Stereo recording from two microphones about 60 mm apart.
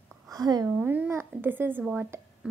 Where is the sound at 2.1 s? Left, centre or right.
Right.